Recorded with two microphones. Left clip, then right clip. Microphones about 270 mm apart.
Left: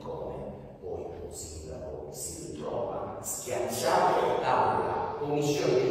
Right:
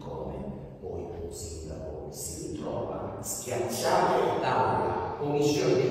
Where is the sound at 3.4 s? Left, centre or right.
Centre.